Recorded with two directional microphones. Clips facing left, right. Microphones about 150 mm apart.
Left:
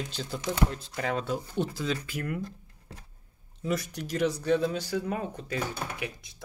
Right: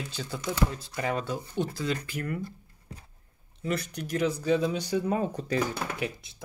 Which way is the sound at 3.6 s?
Centre (ahead or behind).